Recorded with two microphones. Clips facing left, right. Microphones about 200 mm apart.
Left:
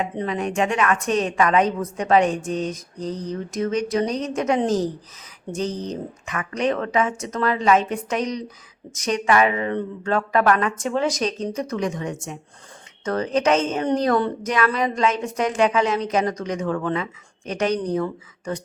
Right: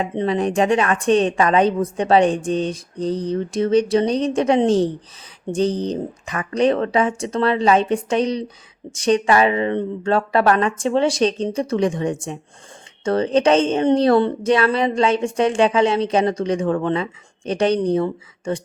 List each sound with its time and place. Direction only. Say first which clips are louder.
0.0 s a woman's voice: right 5 dB; 30° right (ahead or behind)